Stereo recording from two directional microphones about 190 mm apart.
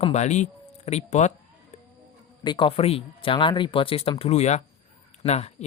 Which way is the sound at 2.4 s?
25° left (ahead or behind).